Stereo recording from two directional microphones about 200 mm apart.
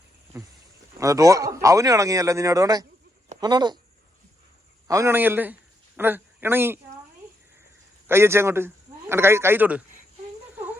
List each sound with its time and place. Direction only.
0.3 s a man's voice: 15° right (ahead or behind)
4.9 s a man's voice: 15° right (ahead or behind)
8.0 s a man's voice: 10° right (ahead or behind)